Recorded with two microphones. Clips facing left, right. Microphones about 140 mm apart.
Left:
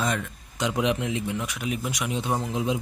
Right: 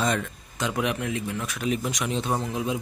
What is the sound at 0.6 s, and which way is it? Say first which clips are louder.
Speech: left 2 dB; 20° left (ahead or behind).